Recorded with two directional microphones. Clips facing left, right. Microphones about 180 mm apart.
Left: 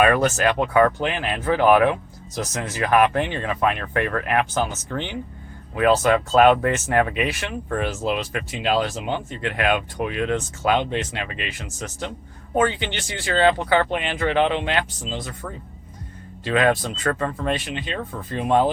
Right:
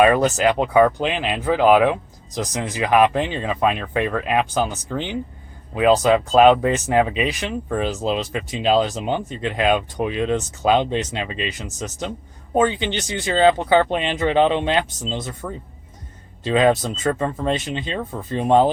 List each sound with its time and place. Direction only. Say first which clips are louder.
0.0 s speech: right 3 dB; 20° right (ahead or behind)
16.5 s speech: right 3 dB; 20° right (ahead or behind)